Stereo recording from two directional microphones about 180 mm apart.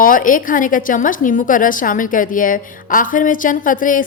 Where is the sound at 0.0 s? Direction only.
50° left (ahead or behind).